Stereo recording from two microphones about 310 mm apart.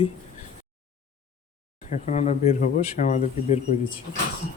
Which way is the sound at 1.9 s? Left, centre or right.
Left.